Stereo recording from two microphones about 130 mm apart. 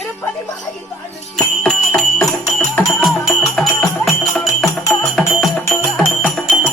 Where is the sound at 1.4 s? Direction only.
5° left (ahead or behind).